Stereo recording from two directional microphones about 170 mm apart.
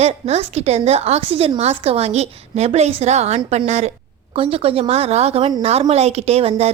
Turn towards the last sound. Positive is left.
turn(degrees=-35)  # may be behind; listen again after turning